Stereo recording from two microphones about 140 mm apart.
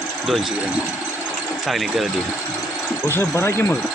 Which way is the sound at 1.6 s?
Centre (ahead or behind).